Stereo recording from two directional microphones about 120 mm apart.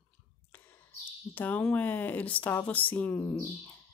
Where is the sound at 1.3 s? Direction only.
15° left (ahead or behind).